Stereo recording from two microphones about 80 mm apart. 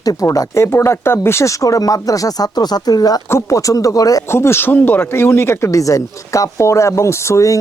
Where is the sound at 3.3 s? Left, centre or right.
Left.